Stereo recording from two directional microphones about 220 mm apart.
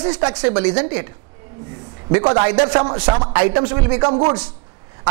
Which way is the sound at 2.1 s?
20° right (ahead or behind).